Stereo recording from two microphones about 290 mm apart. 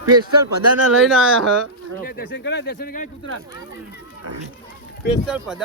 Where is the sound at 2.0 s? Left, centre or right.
Left.